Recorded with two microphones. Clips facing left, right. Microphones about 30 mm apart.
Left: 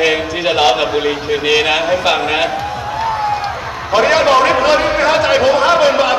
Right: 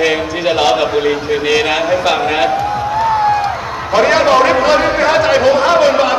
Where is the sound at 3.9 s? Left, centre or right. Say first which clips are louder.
Right 1 dB; centre.